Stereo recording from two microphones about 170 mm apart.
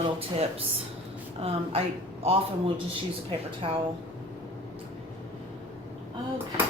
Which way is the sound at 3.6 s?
30° right (ahead or behind).